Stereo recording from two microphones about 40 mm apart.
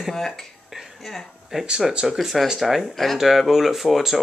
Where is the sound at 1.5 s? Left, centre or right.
Centre.